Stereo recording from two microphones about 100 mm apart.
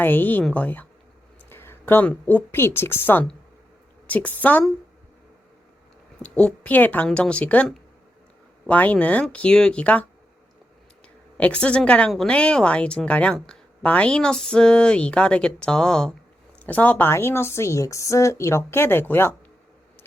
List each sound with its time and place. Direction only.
0.0 s a woman's voice: 20° left (ahead or behind)
6.2 s a woman's voice: 10° left (ahead or behind)
11.3 s a woman's voice: 10° left (ahead or behind)